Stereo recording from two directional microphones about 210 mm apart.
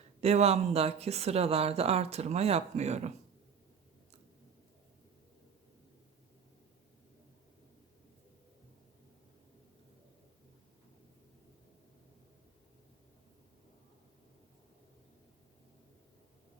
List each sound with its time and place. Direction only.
0.2 s speech: 30° right (ahead or behind)